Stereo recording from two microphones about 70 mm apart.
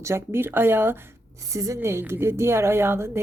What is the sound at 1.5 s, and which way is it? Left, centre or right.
Speech, right.